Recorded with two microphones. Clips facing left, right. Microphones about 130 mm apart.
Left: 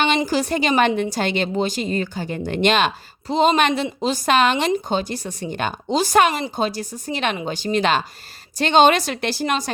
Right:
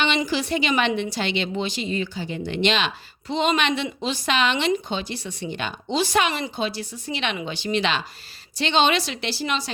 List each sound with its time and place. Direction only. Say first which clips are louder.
0.3 s a woman's voice: left 3 dB; 45° left (ahead or behind)